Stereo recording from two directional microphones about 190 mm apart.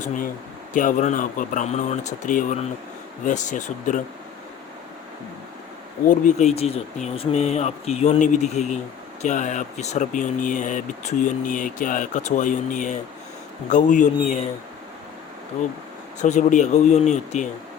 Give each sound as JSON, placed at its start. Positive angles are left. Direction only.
{"t": 0.7, "sound": "speech", "side_deg": 45}
{"t": 6.1, "sound": "speech", "side_deg": 40}
{"t": 16.2, "sound": "speech", "side_deg": 40}